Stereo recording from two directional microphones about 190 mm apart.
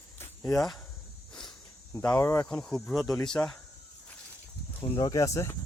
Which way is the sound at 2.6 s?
Centre (ahead or behind).